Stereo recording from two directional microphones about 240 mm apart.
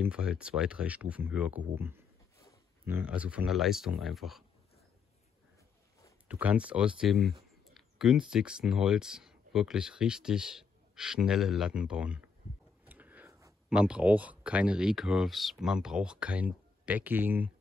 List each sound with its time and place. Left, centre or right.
0.0 s speech: centre
6.2 s speech: centre